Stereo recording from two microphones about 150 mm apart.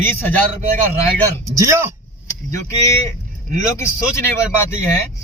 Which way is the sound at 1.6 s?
20° right (ahead or behind).